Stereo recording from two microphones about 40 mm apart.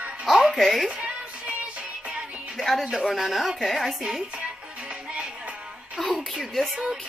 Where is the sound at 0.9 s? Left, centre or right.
Right.